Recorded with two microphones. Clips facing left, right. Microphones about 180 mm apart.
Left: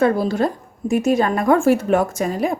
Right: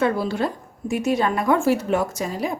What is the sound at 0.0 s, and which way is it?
A woman's voice, 40° left (ahead or behind).